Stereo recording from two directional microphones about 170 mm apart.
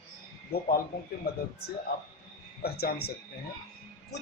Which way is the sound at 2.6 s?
65° left (ahead or behind).